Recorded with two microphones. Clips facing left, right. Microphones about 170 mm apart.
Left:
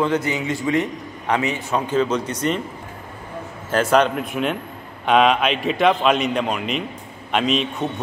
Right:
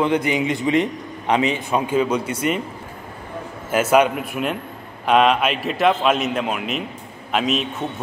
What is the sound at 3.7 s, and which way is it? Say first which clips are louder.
A man's voice: right 1 dB; 10° right (ahead or behind).